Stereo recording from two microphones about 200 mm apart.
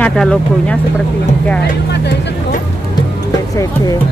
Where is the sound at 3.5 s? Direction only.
15° left (ahead or behind).